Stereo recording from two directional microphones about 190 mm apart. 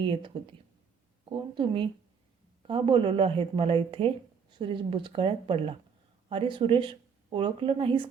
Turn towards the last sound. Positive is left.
turn(degrees=-30)  # may be behind; listen again after turning